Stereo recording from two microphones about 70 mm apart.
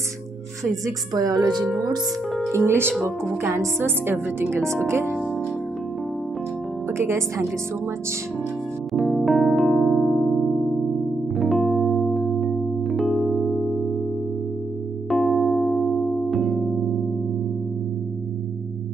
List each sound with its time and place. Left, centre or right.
0.8 s a woman's voice: right
1.6 s speech: centre
2.5 s a woman's voice: right
6.9 s a woman's voice: right
8.9 s electric piano: centre
11.3 s music: centre
13.2 s electric piano: centre
13.5 s music: centre
15.0 s electric piano: centre